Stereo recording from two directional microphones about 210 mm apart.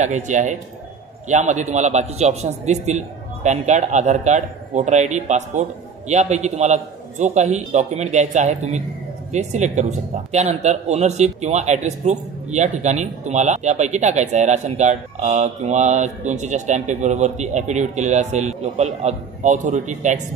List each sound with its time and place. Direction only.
0.0 s speech: 35° right (ahead or behind)